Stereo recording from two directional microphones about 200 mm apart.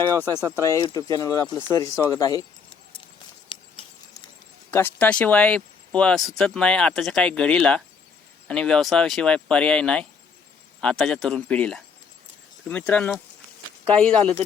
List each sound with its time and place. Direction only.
0.6 s speech: 15° left (ahead or behind)
4.7 s speech: 10° left (ahead or behind)